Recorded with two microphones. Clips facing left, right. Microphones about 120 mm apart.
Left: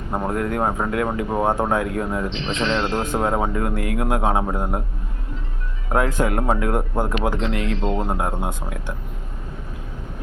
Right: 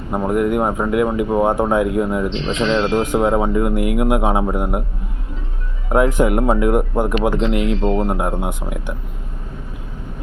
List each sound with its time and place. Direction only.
0.1 s speech: 15° right (ahead or behind)
5.9 s speech: 20° right (ahead or behind)